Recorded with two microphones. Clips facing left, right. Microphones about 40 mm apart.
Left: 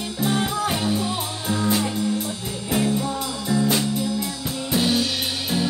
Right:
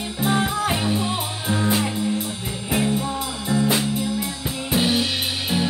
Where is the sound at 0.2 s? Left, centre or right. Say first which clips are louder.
Right 1 dB; right.